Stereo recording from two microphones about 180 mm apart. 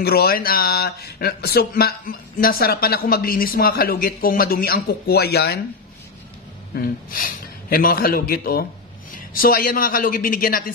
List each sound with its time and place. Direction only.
0.0 s speech: 60° left (ahead or behind)
6.7 s a man's voice: 55° left (ahead or behind)